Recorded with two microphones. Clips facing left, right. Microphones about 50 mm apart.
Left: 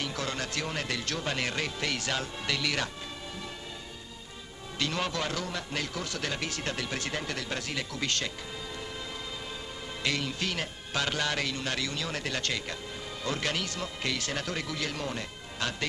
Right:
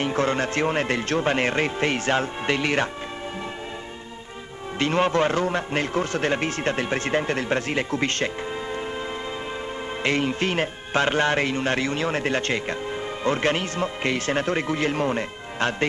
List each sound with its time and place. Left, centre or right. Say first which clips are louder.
0.0 s a man's voice: right 11 dB; right
4.7 s a man's voice: right 11 dB; right
10.0 s a man's voice: right 8 dB; right